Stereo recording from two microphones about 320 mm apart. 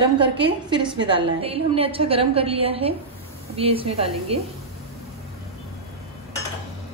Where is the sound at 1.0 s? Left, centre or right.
Centre.